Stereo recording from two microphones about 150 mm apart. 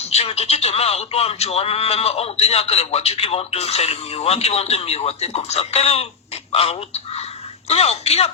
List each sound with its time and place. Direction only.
0.0 s speech: 45° left (ahead or behind)